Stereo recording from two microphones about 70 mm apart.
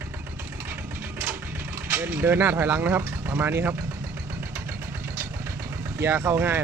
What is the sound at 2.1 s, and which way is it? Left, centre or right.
Speech, right.